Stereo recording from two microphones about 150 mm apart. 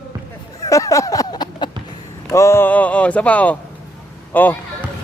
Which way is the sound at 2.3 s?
20° left (ahead or behind).